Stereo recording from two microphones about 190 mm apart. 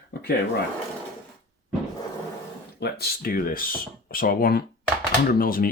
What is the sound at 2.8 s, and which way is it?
Speech, 55° left (ahead or behind).